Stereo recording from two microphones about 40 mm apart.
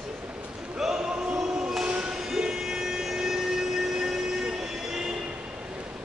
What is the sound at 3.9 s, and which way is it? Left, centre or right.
Train, centre.